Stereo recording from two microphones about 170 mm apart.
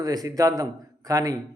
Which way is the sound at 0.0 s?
20° right (ahead or behind).